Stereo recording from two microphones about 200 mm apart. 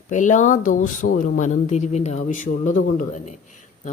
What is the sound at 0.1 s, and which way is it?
Speech, 40° left (ahead or behind).